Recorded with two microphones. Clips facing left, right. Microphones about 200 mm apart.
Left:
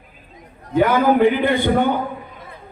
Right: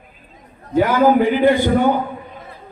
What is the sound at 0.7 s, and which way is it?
A man's voice, 60° left (ahead or behind).